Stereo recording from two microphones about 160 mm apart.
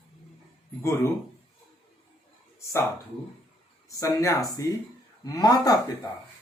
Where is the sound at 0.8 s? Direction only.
15° left (ahead or behind).